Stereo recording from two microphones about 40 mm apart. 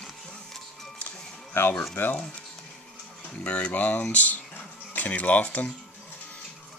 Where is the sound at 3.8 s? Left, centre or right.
Left.